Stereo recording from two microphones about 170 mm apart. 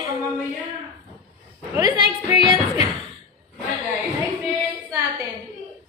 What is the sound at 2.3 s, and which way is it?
Music, 35° left (ahead or behind).